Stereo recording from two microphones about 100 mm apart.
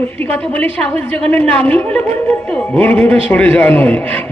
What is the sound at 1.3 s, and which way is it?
A man's voice, 15° left (ahead or behind).